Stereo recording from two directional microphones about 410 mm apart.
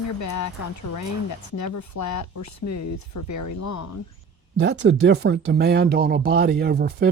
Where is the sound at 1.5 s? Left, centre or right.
Left.